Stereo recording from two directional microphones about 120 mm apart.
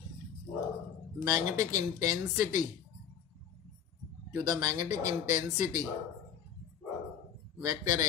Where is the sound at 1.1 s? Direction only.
25° right (ahead or behind).